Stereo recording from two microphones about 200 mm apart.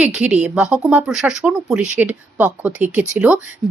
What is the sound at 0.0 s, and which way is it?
Speech, 5° right (ahead or behind).